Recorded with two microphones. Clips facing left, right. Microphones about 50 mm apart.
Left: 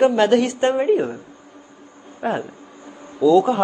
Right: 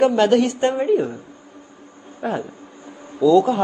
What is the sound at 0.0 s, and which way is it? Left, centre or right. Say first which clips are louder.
Speech: even; centre.